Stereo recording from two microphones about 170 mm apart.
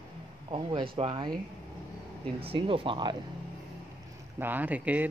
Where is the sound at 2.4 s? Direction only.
35° right (ahead or behind).